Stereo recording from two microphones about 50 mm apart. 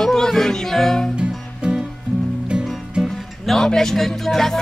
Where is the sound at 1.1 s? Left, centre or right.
Centre.